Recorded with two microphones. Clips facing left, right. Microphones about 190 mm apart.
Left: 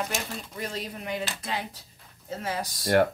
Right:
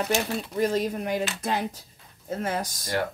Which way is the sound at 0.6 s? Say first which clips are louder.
Right 11 dB; 45° right (ahead or behind).